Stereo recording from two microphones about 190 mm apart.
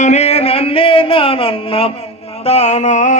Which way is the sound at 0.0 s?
35° left (ahead or behind).